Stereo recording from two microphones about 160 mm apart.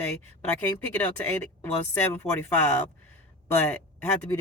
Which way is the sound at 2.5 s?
15° left (ahead or behind).